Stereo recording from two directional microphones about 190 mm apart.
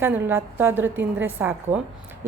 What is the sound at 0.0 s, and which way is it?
A woman's voice, 10° right (ahead or behind).